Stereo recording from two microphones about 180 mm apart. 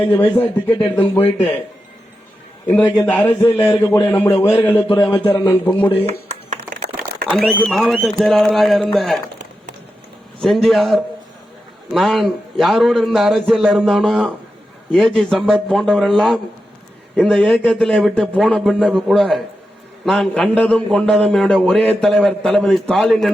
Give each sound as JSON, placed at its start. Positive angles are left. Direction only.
{"t": 0.0, "sound": "speech", "side_deg": 10}
{"t": 2.6, "sound": "speech", "side_deg": 10}
{"t": 6.1, "sound": "a sound", "side_deg": -40}
{"t": 6.8, "sound": "a sound", "side_deg": -60}
{"t": 7.4, "sound": "a man's voice", "side_deg": 0}
{"t": 10.4, "sound": "a man's voice", "side_deg": 0}